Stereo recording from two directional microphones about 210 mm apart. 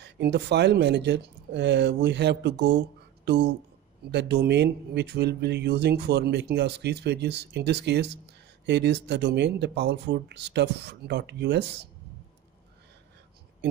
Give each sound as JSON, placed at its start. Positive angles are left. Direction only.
{"t": 0.0, "sound": "speech", "side_deg": -55}